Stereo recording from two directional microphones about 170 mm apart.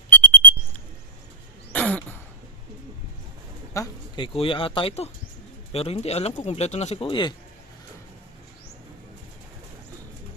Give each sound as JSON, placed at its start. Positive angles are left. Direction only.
{"t": 0.1, "sound": "alarm", "side_deg": 10}
{"t": 1.7, "sound": "throat clearing", "side_deg": 10}
{"t": 3.8, "sound": "speech", "side_deg": 25}